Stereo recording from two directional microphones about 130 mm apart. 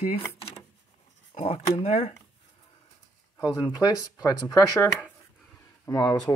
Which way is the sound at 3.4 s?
30° left (ahead or behind).